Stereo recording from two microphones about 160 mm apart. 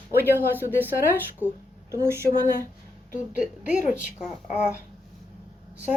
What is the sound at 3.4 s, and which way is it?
Speech, 10° right (ahead or behind).